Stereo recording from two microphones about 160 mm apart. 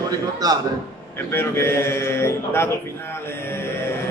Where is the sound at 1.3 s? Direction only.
15° left (ahead or behind).